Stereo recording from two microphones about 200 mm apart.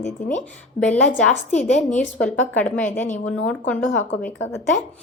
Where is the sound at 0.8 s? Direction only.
5° left (ahead or behind).